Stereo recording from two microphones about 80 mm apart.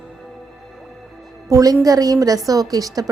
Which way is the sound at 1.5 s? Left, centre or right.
Right.